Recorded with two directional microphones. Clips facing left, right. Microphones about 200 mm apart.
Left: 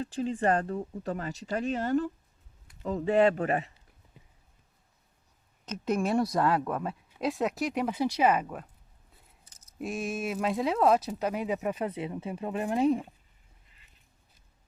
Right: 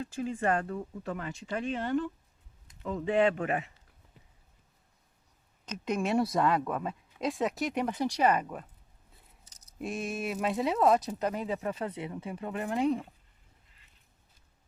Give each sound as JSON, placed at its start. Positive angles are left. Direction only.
{"t": 0.0, "sound": "speech", "side_deg": 35}
{"t": 5.7, "sound": "speech", "side_deg": 5}
{"t": 9.7, "sound": "speech", "side_deg": 0}
{"t": 11.8, "sound": "speech", "side_deg": 25}